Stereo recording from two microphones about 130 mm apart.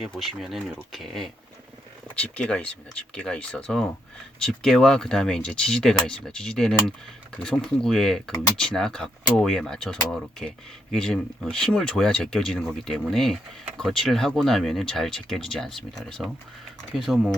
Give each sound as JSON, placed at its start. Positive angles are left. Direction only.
{"t": 0.0, "sound": "speech", "side_deg": 0}